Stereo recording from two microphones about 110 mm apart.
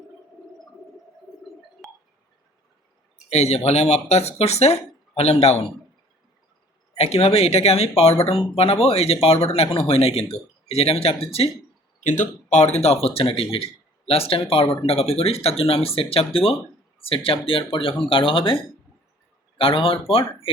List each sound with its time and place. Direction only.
3.2 s speech: 80° left
7.0 s speech: 70° left (ahead or behind)
12.0 s speech: 90° left; by 14.4 s 60° left (ahead or behind)
14.5 s speech: 45° left (ahead or behind)
14.8 s speech: 65° left (ahead or behind)